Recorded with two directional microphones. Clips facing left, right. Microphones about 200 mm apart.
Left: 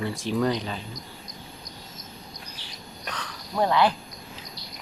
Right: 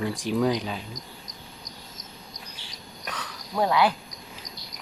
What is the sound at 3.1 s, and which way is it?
Cricket, 5° right (ahead or behind).